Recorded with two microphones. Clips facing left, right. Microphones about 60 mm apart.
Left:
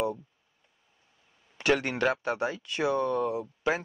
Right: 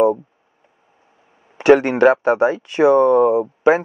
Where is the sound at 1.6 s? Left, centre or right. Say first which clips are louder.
Right 14 dB; right.